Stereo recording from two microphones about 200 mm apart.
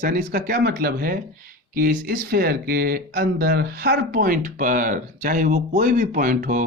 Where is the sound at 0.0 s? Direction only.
50° right (ahead or behind).